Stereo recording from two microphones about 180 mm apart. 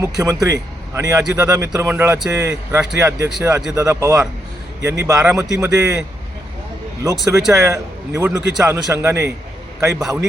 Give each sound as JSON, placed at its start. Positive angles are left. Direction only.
{"t": 0.0, "sound": "speech", "side_deg": -20}
{"t": 7.0, "sound": "speech", "side_deg": -15}
{"t": 9.8, "sound": "a man's voice", "side_deg": -5}